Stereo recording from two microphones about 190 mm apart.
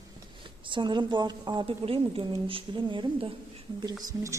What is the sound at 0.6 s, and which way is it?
A woman's voice, 25° right (ahead or behind).